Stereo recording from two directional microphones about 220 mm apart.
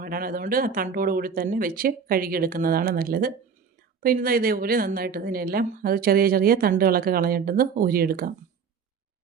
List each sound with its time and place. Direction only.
0.0 s a woman's voice: 40° right (ahead or behind)